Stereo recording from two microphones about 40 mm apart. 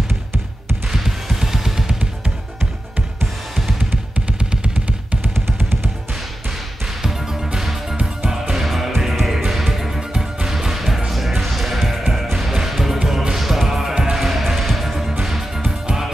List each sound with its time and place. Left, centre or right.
0.9 s drum kit: centre
4.3 s vehicle: right
5.2 s drum kit: right
7.0 s music: centre